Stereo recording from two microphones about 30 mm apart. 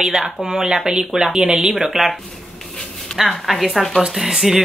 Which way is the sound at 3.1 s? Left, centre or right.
Left.